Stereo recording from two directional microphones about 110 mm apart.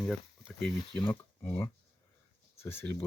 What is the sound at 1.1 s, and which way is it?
Speech, 20° left (ahead or behind).